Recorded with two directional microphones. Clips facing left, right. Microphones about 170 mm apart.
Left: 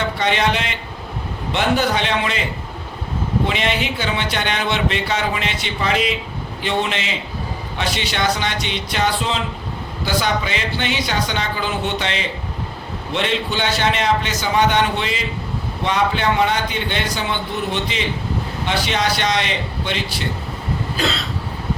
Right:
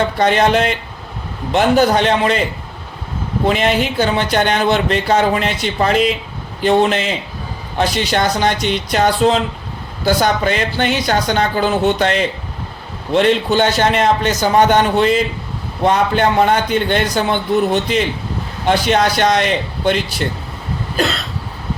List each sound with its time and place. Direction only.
0.2 s speech: 45° right (ahead or behind)
3.4 s speech: 45° right (ahead or behind)